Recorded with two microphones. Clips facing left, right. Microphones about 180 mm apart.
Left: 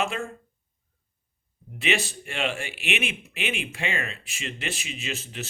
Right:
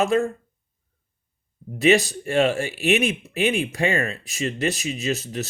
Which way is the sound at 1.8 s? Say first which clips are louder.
Right 10 dB; 40° right (ahead or behind).